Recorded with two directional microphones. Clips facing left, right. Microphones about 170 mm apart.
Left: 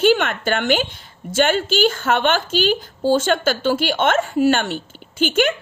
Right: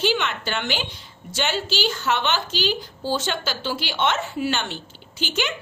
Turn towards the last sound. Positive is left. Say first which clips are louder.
# left 9 dB
turn(degrees=50)  # may be behind; listen again after turning